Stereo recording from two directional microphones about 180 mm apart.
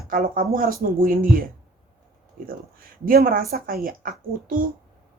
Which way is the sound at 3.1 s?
50° right (ahead or behind).